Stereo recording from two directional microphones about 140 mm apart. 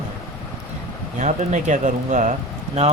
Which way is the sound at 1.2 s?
60° right (ahead or behind).